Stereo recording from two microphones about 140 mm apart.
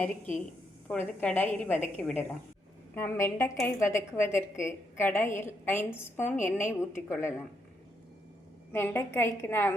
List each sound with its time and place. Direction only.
0.0 s a woman's voice: 10° left (ahead or behind)
8.7 s a woman's voice: 15° left (ahead or behind)